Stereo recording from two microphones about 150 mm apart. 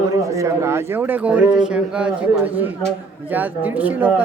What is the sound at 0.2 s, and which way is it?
A man's voice, 20° right (ahead or behind).